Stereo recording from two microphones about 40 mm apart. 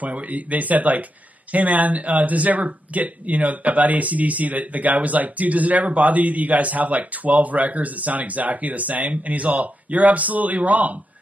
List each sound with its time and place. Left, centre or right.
0.0 s speech: right